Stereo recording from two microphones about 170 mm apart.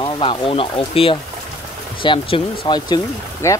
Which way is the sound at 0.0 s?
30° left (ahead or behind).